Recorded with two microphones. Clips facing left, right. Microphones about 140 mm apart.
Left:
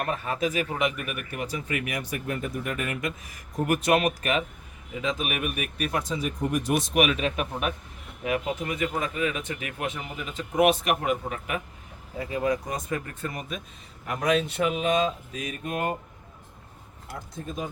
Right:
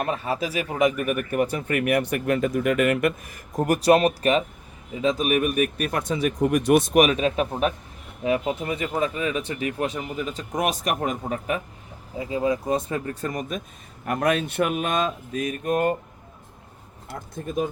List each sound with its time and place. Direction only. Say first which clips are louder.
0.1 s speech: right 2 dB; 35° right (ahead or behind); by 3.6 s 55° right (ahead or behind)
3.6 s speech: right 5 dB; 35° right (ahead or behind); by 7.0 s 55° right (ahead or behind)
7.0 s speech: right 4 dB; 35° right (ahead or behind)
12.1 s speech: right 3 dB; 20° right (ahead or behind)
13.2 s speech: right 5 dB; 45° right (ahead or behind)
14.0 s speech: right 2 dB; 55° right (ahead or behind)